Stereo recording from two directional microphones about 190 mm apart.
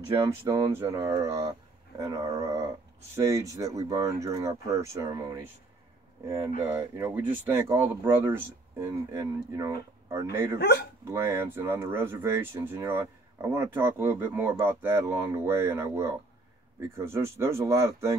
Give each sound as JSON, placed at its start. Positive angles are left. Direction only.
{"t": 0.5, "sound": "speech", "side_deg": -15}
{"t": 10.6, "sound": "speech", "side_deg": 55}
{"t": 11.1, "sound": "speech", "side_deg": -15}